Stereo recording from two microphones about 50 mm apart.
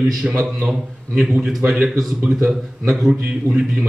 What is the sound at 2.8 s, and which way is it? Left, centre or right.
A man's voice, centre.